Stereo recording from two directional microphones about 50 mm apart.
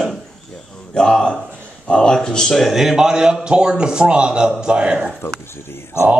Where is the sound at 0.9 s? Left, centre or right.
Centre.